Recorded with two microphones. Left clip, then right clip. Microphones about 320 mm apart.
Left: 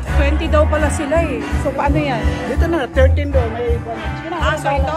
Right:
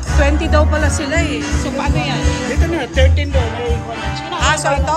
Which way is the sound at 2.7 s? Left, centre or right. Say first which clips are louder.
Left 2 dB; left.